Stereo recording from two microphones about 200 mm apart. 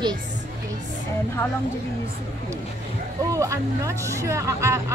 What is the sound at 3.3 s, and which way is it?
Speech, 15° right (ahead or behind).